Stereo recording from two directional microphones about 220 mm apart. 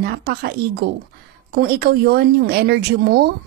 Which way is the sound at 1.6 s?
45° right (ahead or behind).